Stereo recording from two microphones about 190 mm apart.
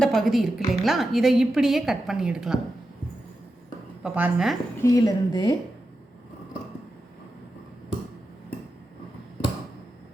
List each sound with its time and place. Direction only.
0.0 s a woman's voice: centre (ahead or behind)
4.0 s a woman's voice: 5° right (ahead or behind)
4.8 s speech: 20° left (ahead or behind)